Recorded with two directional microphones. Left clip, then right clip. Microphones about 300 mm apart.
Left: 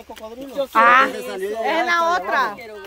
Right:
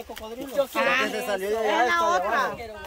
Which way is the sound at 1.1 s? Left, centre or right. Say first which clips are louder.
Even; centre.